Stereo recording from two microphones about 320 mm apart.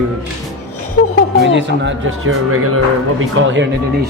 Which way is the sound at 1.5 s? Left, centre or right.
Right.